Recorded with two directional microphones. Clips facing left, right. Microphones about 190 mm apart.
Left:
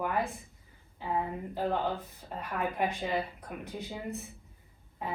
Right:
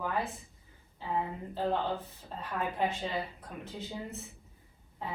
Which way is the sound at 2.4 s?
15° left (ahead or behind).